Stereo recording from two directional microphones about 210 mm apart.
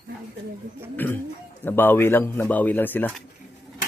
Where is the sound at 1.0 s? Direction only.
10° left (ahead or behind).